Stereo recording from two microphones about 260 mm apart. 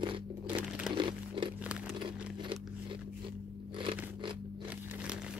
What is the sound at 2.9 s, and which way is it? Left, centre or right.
Biting, centre.